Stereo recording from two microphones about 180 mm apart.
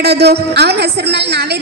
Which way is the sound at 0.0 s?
65° right (ahead or behind).